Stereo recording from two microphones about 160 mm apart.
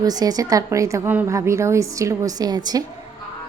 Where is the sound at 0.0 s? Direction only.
25° right (ahead or behind).